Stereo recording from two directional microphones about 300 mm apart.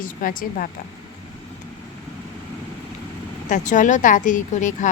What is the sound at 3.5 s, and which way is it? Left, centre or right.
A woman's voice, left.